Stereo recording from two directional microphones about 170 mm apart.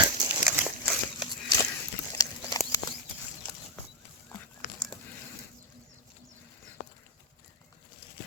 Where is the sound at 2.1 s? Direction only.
20° left (ahead or behind).